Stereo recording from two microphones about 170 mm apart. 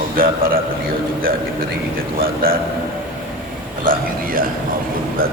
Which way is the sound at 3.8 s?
55° right (ahead or behind).